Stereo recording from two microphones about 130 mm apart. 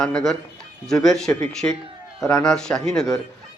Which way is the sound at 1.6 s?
15° left (ahead or behind).